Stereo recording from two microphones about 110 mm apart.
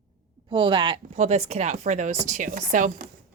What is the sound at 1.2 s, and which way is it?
Speech, 75° right (ahead or behind).